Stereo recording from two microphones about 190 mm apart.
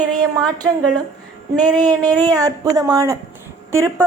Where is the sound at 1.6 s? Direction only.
20° right (ahead or behind).